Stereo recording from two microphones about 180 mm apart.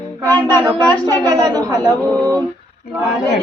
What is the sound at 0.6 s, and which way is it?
A woman's voice, 20° right (ahead or behind).